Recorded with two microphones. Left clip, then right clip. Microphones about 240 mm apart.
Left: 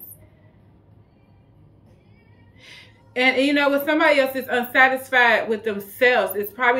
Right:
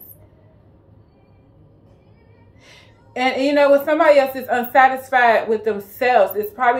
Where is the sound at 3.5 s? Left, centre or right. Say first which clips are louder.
Right 5 dB; left.